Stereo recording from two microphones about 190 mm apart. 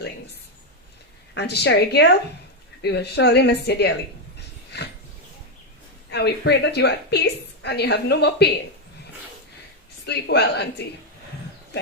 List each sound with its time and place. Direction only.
1.3 s a woman's voice: 60° left (ahead or behind)
6.1 s a woman's voice: 60° left (ahead or behind)
10.1 s a woman's voice: 60° left (ahead or behind)